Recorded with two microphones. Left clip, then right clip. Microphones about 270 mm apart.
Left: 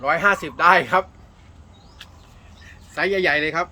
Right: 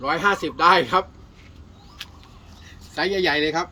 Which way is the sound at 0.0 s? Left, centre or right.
Centre.